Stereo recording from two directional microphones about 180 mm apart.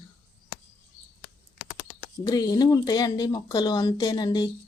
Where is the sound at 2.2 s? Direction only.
20° left (ahead or behind).